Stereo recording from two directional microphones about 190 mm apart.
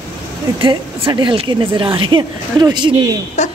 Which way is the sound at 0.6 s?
25° right (ahead or behind).